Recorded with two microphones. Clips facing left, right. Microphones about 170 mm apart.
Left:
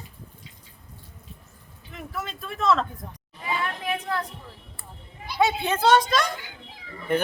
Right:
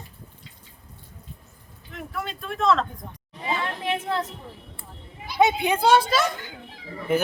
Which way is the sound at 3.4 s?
25° right (ahead or behind).